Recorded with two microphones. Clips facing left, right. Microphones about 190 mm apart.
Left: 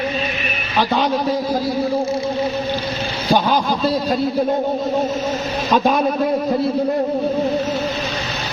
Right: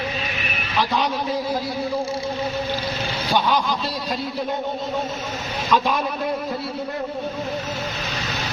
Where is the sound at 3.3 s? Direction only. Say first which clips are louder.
Left 4 dB; 40° left (ahead or behind).